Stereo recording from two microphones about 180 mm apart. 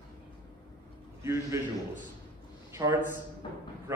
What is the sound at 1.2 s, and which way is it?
Speech, 15° right (ahead or behind).